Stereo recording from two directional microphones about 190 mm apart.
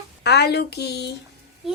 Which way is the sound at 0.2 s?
60° left (ahead or behind).